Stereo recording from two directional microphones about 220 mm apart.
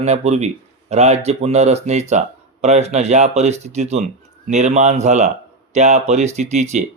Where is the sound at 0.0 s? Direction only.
30° right (ahead or behind).